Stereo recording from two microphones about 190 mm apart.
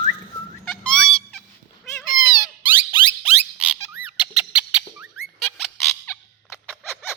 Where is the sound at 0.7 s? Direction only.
5° left (ahead or behind).